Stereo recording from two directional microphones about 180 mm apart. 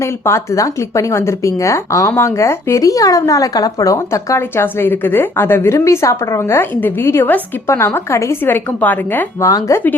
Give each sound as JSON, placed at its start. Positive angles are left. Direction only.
{"t": 0.0, "sound": "speech", "side_deg": 15}